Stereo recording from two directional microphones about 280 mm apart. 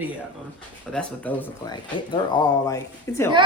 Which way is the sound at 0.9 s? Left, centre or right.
Centre.